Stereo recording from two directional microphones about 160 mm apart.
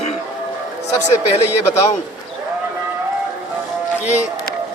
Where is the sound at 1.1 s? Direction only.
40° left (ahead or behind).